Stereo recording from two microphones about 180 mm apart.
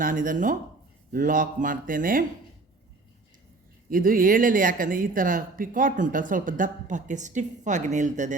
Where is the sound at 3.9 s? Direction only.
50° right (ahead or behind).